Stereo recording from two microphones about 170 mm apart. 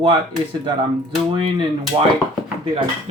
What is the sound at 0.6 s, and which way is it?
Speech, 30° right (ahead or behind).